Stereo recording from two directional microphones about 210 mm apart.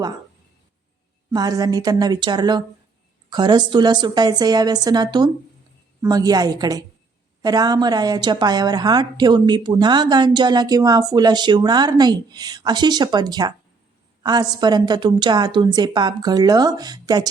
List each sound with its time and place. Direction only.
1.3 s a woman's voice: 20° right (ahead or behind)